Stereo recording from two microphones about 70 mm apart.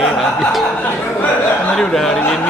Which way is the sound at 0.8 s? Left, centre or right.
Left.